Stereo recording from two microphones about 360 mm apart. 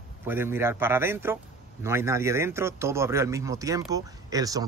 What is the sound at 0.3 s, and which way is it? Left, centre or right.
A man's voice, centre.